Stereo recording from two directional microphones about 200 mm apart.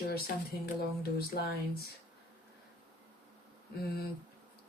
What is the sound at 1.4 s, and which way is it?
Speech, 55° left (ahead or behind).